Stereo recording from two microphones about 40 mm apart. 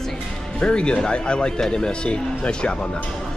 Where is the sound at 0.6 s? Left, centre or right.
Left.